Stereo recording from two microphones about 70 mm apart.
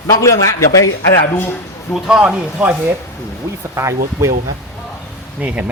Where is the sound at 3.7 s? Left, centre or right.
Right.